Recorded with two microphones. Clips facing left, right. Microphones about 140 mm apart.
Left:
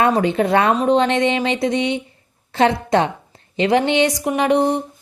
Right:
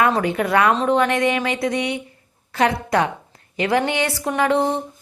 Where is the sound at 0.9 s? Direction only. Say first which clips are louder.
Left 2 dB; 25° left (ahead or behind).